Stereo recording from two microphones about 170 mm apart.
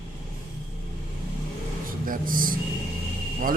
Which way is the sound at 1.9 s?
55° right (ahead or behind).